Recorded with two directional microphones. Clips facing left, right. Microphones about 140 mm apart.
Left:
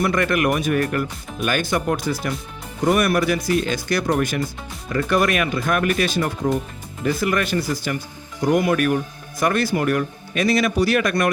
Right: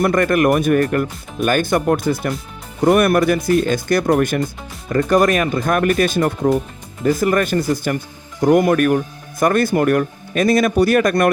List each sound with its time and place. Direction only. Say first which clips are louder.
0.0 s speech: right 5 dB; 45° right (ahead or behind)
4.9 s speech: right 5 dB; 40° right (ahead or behind)